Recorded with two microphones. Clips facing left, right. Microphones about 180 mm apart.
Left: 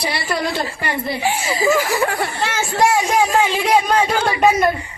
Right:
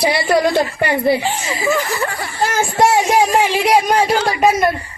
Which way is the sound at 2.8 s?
25° right (ahead or behind).